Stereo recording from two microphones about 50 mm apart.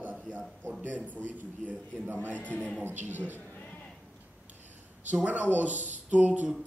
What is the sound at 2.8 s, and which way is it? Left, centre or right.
Speech, right.